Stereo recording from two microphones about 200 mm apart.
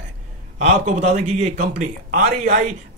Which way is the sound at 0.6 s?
35° right (ahead or behind).